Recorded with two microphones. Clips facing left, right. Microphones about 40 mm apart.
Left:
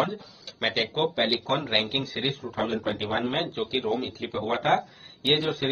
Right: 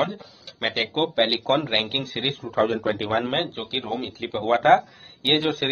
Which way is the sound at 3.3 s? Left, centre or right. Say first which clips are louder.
Right 3 dB; right.